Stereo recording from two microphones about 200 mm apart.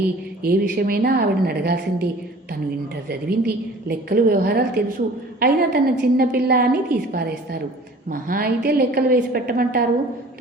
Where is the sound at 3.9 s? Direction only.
50° right (ahead or behind).